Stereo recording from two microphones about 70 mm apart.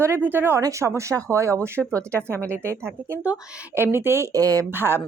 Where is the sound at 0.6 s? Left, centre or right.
Right.